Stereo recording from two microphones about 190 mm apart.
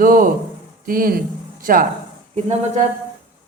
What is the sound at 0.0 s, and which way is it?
Speech, 45° right (ahead or behind).